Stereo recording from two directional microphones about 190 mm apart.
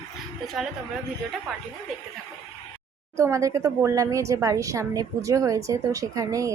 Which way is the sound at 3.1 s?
15° right (ahead or behind).